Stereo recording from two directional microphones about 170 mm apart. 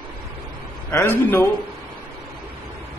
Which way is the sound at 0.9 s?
15° left (ahead or behind).